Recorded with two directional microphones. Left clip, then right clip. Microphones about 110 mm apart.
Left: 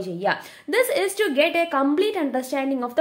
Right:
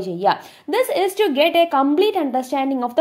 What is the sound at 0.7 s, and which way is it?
A woman's voice, 15° right (ahead or behind).